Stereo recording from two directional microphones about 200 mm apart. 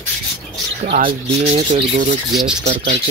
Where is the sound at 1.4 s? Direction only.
35° right (ahead or behind).